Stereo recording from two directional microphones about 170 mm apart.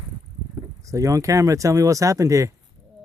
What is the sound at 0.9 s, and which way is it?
Speech, 20° right (ahead or behind).